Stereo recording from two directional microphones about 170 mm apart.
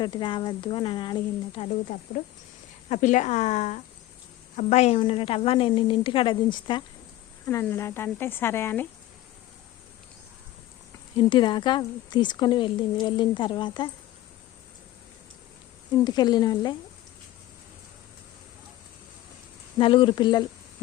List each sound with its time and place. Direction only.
0.0 s a woman's voice: 25° left (ahead or behind)
1.6 s a woman's voice: 50° left (ahead or behind); by 6.8 s 25° left (ahead or behind)
7.4 s speech: 15° left (ahead or behind)
11.2 s a woman's voice: 25° left (ahead or behind)
16.0 s a woman's voice: 25° left (ahead or behind)
19.8 s a woman's voice: 30° left (ahead or behind)